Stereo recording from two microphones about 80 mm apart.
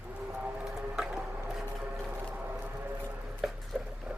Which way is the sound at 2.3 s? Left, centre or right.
Centre.